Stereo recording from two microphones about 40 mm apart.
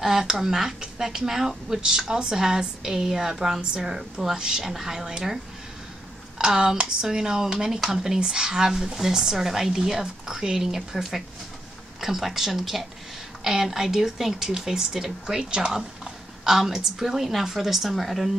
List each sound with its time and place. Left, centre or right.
0.0 s speech: centre